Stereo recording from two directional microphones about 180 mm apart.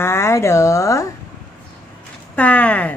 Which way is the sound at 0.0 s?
15° left (ahead or behind).